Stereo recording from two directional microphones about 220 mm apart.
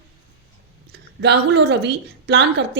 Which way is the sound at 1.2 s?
50° right (ahead or behind).